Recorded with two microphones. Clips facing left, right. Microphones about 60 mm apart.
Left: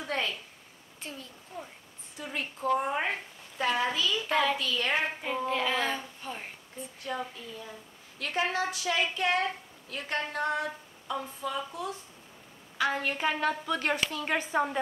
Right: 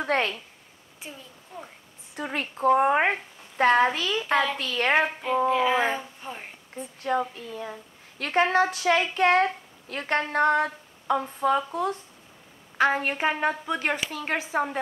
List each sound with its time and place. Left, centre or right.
0.0 s speech: right
1.0 s a child's voice: centre
2.1 s a woman's voice: right
5.5 s a child's voice: centre
5.8 s a woman's voice: right
7.3 s a woman's voice: right; by 14.1 s centre
14.1 s a woman's voice: right
14.4 s a child's voice: centre